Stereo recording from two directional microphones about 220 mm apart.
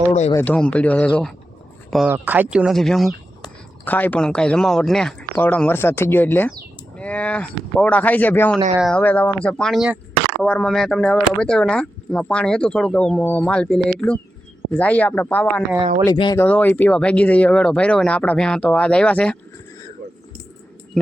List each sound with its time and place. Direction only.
0.1 s speech: 30° left (ahead or behind)
0.3 s speech: 5° left (ahead or behind)
16.0 s speech: 20° left (ahead or behind)
16.4 s speech: 10° left (ahead or behind)
20.9 s speech: centre (ahead or behind)